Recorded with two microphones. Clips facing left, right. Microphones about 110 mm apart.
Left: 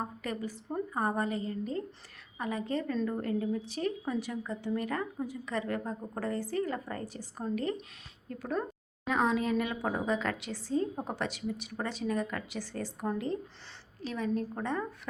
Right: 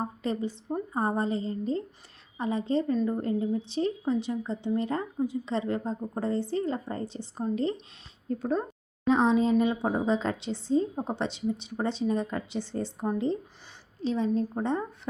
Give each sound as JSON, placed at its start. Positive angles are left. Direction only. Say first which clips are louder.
{"t": 0.0, "sound": "a woman's voice", "louder": "right 5 dB", "side_deg": -25}